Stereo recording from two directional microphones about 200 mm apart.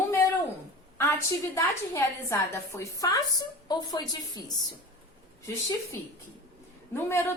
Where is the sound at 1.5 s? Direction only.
15° left (ahead or behind).